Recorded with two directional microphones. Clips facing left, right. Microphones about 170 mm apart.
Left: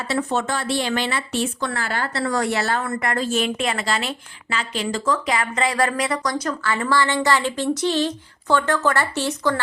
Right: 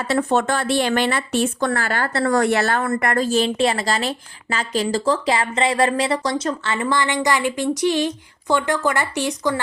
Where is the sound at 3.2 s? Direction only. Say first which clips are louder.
Right 5 dB; 30° right (ahead or behind).